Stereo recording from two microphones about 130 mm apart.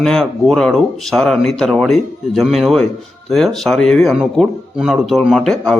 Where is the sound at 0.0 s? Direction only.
Centre (ahead or behind).